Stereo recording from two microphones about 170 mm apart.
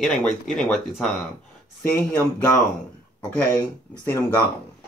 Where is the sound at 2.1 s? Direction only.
10° left (ahead or behind).